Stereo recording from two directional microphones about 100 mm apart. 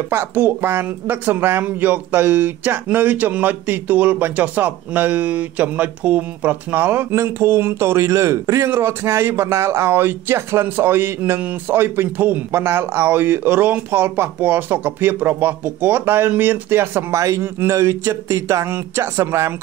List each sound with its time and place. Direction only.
0.1 s speech: 20° right (ahead or behind)